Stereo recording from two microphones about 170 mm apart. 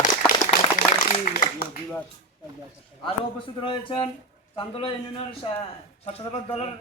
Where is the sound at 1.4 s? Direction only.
60° left (ahead or behind).